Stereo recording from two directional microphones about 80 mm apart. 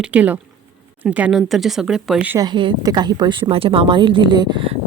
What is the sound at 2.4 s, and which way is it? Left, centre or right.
Speech, right.